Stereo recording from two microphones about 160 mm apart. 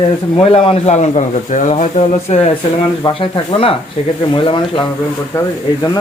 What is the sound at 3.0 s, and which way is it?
Speech, 30° left (ahead or behind).